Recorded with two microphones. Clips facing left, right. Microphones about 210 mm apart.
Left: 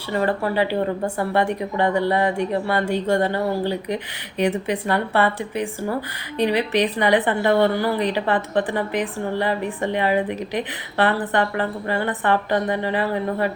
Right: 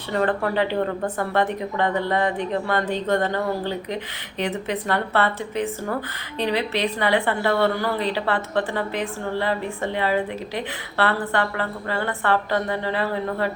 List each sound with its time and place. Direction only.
0.3 s a woman's voice: 10° left (ahead or behind)